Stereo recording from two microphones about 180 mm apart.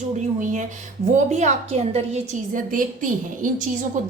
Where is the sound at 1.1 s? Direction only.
40° right (ahead or behind).